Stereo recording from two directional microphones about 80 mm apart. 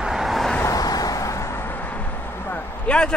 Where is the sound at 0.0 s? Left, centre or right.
Centre.